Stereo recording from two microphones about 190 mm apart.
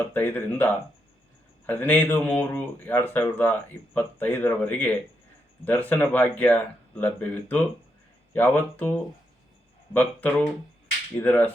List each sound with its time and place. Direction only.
0.0 s speech: 10° left (ahead or behind)
9.9 s speech: 10° left (ahead or behind)